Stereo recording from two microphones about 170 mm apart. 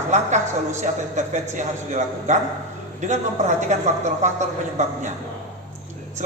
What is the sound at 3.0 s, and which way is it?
Speech, 45° right (ahead or behind).